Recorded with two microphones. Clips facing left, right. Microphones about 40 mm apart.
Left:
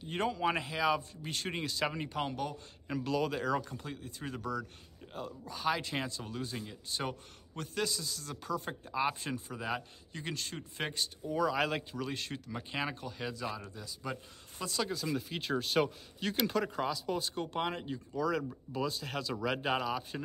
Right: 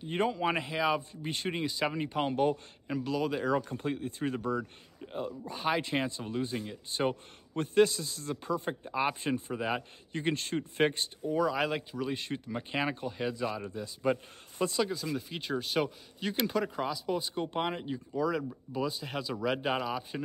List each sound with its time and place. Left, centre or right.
0.0 s speech: centre
2.3 s speech: right
2.9 s speech: centre
3.6 s speech: right
10.1 s speech: right
11.2 s speech: centre
12.1 s speech: centre; by 14.7 s right
14.8 s speech: centre